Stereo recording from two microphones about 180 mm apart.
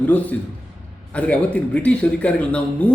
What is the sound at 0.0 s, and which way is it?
A man's voice, 10° left (ahead or behind).